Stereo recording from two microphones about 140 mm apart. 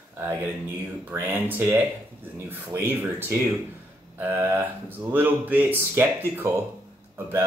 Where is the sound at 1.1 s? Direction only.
15° right (ahead or behind).